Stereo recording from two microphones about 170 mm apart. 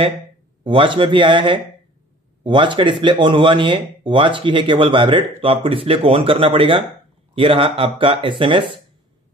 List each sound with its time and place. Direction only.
0.7 s speech: 30° right (ahead or behind)